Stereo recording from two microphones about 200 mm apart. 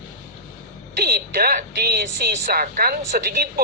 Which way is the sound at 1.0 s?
50° right (ahead or behind).